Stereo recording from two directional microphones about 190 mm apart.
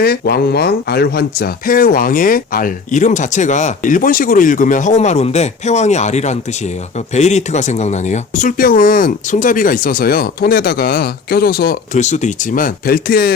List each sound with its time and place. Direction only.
0.0 s speech: 55° left (ahead or behind)
12.0 s speech: 40° left (ahead or behind)